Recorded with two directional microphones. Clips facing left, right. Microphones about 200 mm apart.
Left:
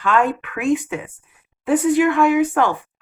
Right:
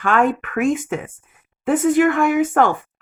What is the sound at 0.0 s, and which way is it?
Speech, 50° right (ahead or behind).